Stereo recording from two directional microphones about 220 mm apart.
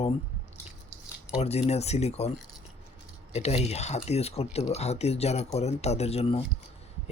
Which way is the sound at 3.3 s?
30° left (ahead or behind).